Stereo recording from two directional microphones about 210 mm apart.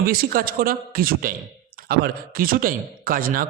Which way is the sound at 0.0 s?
45° right (ahead or behind).